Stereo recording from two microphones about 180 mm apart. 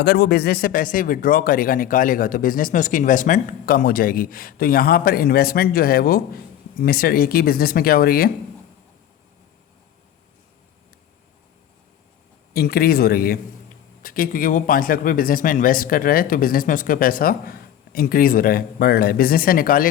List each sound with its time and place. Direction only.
0.0 s speech: 60° left (ahead or behind)
12.5 s a man's voice: 60° left (ahead or behind)